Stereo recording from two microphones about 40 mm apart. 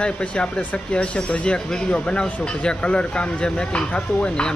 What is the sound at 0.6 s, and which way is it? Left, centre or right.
Speech, left.